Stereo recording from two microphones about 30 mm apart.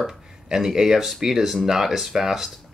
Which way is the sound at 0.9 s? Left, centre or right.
Centre.